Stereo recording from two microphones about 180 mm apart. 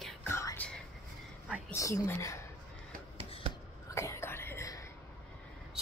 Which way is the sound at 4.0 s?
15° left (ahead or behind).